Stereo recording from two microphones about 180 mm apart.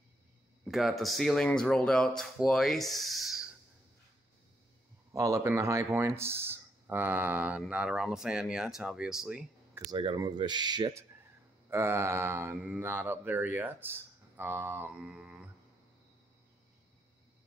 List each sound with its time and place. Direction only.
0.7 s speech: centre (ahead or behind)
5.1 s speech: 15° right (ahead or behind)
9.8 s speech: 25° right (ahead or behind); by 15.4 s 5° right (ahead or behind)